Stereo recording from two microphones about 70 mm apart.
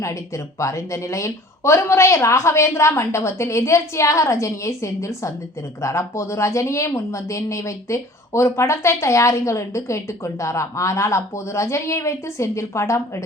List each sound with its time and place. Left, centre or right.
0.0 s a woman's voice: left